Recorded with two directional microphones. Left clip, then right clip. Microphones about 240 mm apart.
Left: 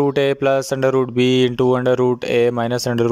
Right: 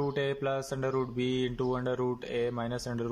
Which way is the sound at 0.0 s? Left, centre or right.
Left.